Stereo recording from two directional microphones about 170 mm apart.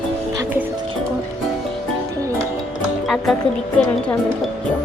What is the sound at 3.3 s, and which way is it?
Speech, centre (ahead or behind).